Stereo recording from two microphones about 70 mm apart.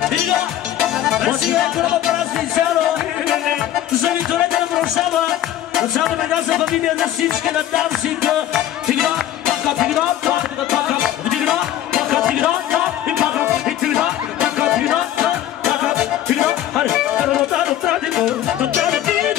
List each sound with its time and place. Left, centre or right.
0.7 s music: centre
4.0 s music: centre